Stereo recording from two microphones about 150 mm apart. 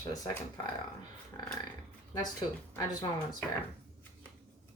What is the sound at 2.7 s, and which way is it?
Speech, 25° left (ahead or behind).